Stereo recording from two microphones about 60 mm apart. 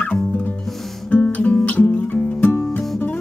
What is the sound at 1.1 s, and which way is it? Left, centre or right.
Music, left.